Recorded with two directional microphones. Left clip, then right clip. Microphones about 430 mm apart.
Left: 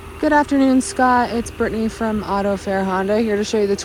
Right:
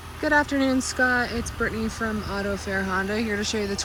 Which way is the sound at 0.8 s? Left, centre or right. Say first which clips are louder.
Left 7 dB; centre.